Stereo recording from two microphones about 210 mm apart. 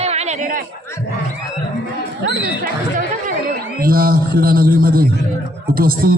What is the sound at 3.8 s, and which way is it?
A man's voice, 45° right (ahead or behind).